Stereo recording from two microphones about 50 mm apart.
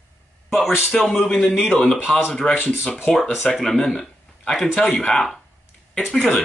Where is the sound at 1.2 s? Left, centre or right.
Centre.